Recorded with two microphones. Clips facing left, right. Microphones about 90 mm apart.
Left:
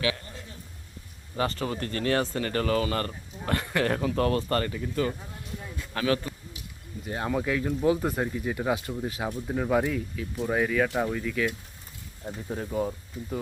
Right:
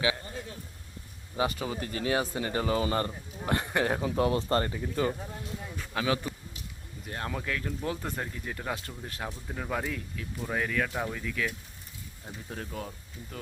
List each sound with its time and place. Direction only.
1.4 s speech: 10° right (ahead or behind)
5.9 s speech: 10° right (ahead or behind)
7.0 s speech: 5° left (ahead or behind)